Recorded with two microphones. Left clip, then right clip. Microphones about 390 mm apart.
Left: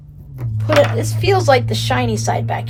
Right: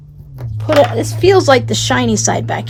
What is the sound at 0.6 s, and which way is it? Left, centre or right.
Speech, right.